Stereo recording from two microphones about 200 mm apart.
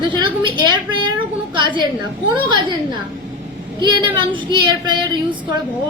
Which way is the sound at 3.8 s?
20° right (ahead or behind).